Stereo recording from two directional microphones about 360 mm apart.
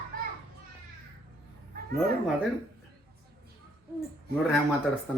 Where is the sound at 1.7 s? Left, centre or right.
Right.